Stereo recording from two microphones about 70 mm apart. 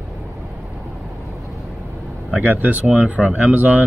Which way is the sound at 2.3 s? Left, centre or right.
Centre.